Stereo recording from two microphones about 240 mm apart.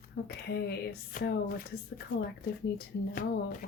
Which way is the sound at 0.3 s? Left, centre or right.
Left.